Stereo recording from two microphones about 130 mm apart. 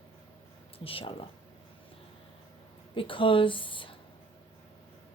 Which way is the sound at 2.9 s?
40° left (ahead or behind).